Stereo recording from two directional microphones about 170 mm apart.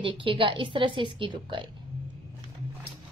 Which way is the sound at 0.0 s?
30° right (ahead or behind).